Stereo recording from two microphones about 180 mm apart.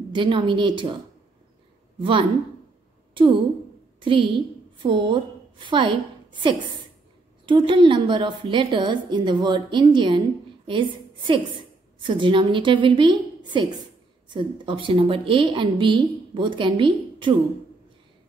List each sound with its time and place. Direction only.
0.1 s a woman's voice: 25° right (ahead or behind)
2.0 s a woman's voice: 30° right (ahead or behind)
4.0 s a woman's voice: 30° right (ahead or behind)